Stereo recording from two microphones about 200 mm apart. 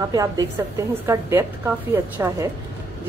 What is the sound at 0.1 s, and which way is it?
Speech, 20° right (ahead or behind).